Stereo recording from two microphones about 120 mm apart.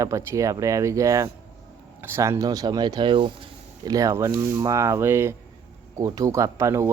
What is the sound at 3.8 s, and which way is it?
Speech, 30° right (ahead or behind).